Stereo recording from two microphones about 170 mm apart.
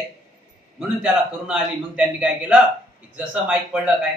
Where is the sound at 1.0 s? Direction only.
5° right (ahead or behind).